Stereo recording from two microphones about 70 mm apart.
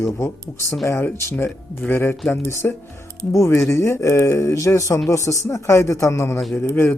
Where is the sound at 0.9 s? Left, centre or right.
Left.